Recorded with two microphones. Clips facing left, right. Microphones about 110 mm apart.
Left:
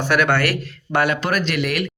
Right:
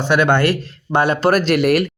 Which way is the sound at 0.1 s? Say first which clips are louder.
Right 4 dB; 20° right (ahead or behind).